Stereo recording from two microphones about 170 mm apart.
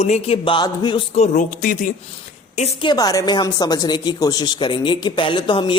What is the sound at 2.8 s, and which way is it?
Speech, 25° left (ahead or behind).